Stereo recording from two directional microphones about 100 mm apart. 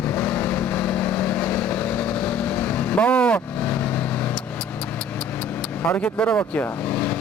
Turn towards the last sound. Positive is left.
turn(degrees=15)  # may be behind; listen again after turning